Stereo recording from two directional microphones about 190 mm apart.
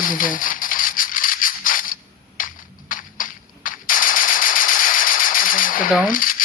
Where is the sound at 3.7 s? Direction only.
45° left (ahead or behind).